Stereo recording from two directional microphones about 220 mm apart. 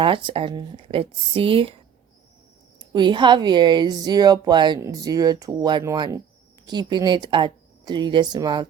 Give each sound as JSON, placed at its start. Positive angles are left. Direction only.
{"t": 0.0, "sound": "speech", "side_deg": -25}